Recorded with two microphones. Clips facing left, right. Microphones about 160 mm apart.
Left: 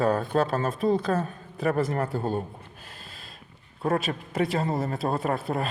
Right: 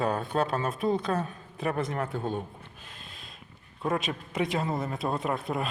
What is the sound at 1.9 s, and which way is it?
Speech, 40° left (ahead or behind).